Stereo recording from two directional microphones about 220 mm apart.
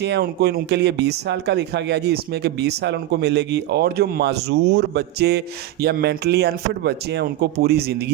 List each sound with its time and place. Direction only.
0.0 s speech: 50° right (ahead or behind)